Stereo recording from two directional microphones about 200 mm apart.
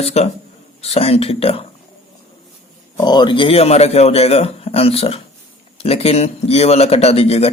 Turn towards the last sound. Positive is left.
turn(degrees=30)  # may be behind; listen again after turning